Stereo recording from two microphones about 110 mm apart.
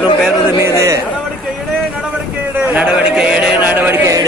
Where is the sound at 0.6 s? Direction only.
25° right (ahead or behind).